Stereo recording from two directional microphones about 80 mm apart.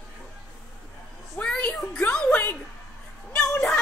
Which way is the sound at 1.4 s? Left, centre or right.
Centre.